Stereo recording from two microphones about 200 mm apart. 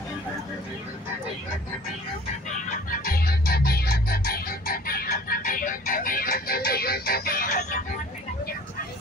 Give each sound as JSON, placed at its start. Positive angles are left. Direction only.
{"t": 2.9, "sound": "music", "side_deg": 45}